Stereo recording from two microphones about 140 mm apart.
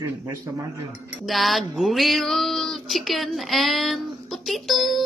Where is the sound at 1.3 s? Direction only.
Centre (ahead or behind).